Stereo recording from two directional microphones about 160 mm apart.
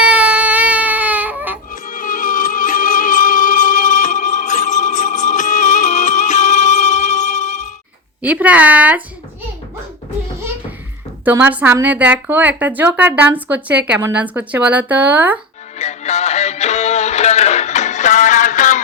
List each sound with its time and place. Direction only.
0.0 s baby cry: 5° right (ahead or behind)
1.7 s music: 55° left (ahead or behind)
8.2 s a woman's voice: 10° right (ahead or behind)
11.3 s a woman's voice: 10° right (ahead or behind)
15.8 s music: 45° left (ahead or behind)